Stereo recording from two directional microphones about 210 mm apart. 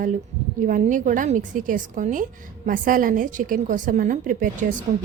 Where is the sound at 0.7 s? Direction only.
40° right (ahead or behind).